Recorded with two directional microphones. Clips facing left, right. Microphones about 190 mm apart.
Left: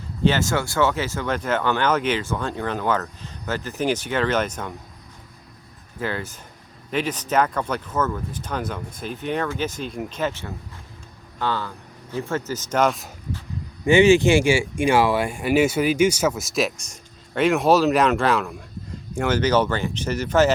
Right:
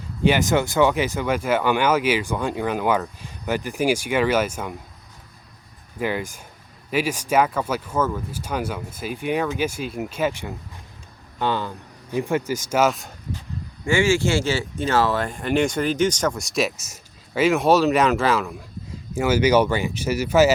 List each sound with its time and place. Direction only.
0.2 s speech: 15° right (ahead or behind)
6.0 s speech: 15° right (ahead or behind)
13.8 s speech: 20° left (ahead or behind); by 20.5 s 10° right (ahead or behind)